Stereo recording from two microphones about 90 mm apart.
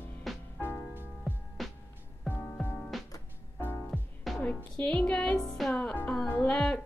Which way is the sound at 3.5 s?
20° left (ahead or behind).